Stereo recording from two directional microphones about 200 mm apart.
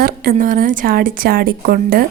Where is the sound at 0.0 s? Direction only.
45° right (ahead or behind).